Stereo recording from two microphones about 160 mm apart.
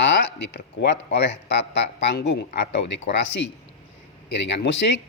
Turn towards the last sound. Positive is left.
turn(degrees=90)